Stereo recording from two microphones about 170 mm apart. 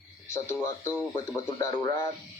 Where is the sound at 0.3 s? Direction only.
15° left (ahead or behind).